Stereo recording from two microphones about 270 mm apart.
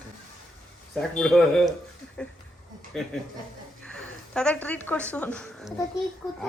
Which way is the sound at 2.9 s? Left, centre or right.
Centre.